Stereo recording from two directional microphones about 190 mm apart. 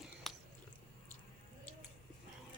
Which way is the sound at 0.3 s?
Centre (ahead or behind).